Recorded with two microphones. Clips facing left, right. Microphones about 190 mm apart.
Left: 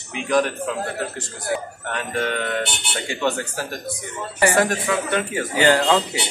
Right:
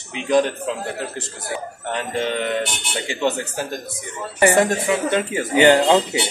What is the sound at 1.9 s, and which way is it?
Speech, 20° right (ahead or behind).